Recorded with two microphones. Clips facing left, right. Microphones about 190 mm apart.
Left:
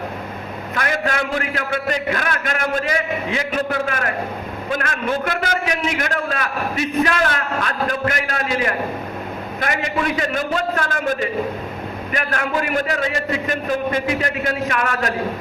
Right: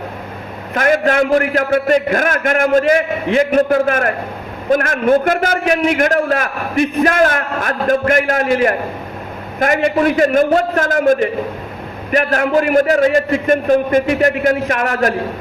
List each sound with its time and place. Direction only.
0.8 s a man's voice: 45° right (ahead or behind)